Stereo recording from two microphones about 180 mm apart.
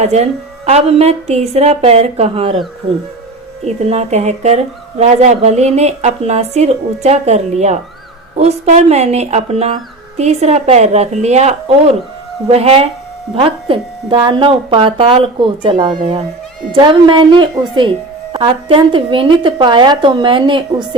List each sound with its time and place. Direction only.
0.0 s speech: 35° right (ahead or behind)
3.6 s speech: 35° right (ahead or behind)